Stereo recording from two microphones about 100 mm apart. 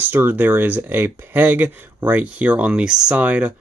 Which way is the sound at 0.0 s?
20° right (ahead or behind).